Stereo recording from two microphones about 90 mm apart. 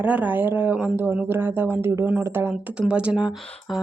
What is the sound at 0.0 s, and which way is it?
Speech, 15° right (ahead or behind).